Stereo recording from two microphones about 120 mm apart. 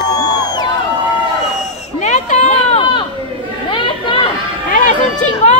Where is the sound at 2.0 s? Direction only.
80° left.